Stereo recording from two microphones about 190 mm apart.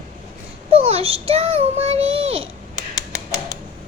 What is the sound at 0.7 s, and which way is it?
Speech, 30° right (ahead or behind).